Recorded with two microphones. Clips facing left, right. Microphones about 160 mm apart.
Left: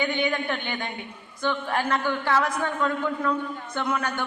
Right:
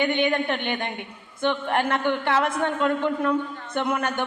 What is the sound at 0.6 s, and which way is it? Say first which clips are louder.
Speech: right 4 dB; 60° right (ahead or behind).